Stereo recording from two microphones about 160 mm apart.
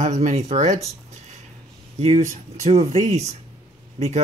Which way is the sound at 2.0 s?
40° right (ahead or behind).